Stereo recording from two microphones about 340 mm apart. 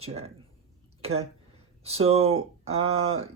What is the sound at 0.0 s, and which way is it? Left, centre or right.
Speech, centre.